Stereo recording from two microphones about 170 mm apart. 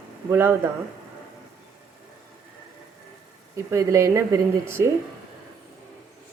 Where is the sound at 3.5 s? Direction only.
15° right (ahead or behind).